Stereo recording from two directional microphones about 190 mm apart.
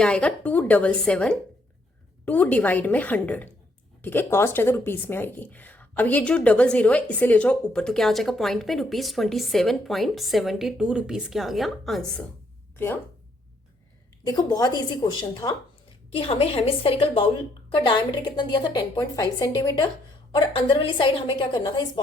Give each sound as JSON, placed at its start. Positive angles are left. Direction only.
{"t": 0.0, "sound": "a woman's voice", "side_deg": 5}
{"t": 14.3, "sound": "a woman's voice", "side_deg": 20}